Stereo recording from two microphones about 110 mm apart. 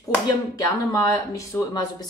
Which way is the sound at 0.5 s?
30° left (ahead or behind).